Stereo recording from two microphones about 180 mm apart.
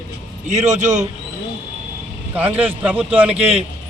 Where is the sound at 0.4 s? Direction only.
40° right (ahead or behind).